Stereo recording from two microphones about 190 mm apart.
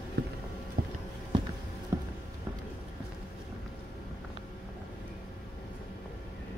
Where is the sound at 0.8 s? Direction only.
50° right (ahead or behind).